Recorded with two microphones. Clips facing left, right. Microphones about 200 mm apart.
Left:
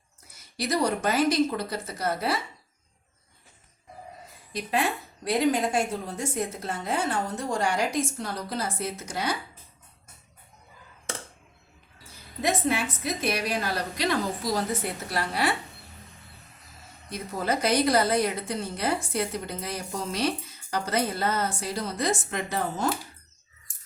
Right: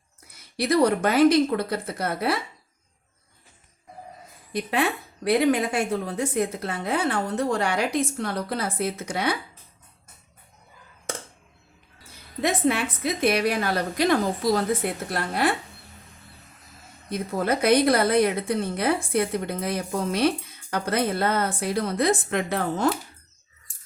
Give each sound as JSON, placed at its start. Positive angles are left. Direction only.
{"t": 0.3, "sound": "a woman's voice", "side_deg": -60}
{"t": 4.5, "sound": "a woman's voice", "side_deg": -60}
{"t": 12.4, "sound": "a woman's voice", "side_deg": -60}
{"t": 17.1, "sound": "a woman's voice", "side_deg": -55}